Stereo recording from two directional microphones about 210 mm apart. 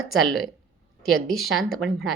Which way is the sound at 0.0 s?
Centre (ahead or behind).